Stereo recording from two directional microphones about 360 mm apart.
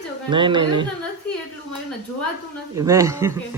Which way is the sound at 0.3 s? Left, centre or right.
Centre.